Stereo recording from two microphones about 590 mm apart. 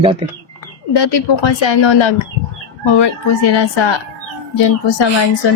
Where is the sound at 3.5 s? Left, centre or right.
Left.